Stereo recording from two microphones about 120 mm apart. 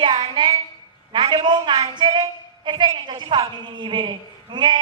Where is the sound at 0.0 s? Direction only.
40° right (ahead or behind).